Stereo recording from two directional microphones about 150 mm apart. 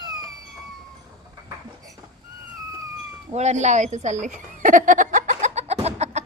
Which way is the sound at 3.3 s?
50° right (ahead or behind).